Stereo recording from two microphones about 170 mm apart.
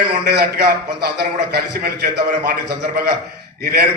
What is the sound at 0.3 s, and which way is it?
A man's voice, 70° right (ahead or behind).